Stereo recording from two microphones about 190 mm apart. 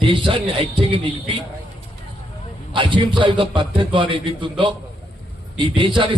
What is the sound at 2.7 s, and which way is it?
A man's voice, 25° right (ahead or behind).